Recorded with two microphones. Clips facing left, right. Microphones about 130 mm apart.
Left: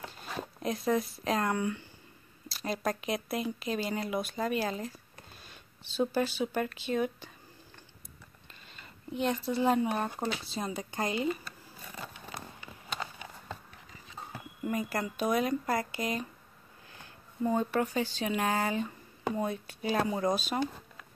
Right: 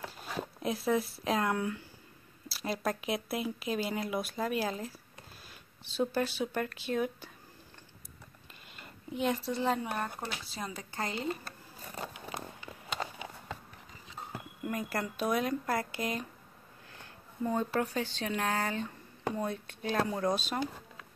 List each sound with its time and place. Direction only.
0.0 s speech: 5° right (ahead or behind)
9.1 s speech: centre (ahead or behind)
9.5 s speech: 10° left (ahead or behind)
11.2 s zipper: 40° right (ahead or behind)
14.6 s speech: centre (ahead or behind)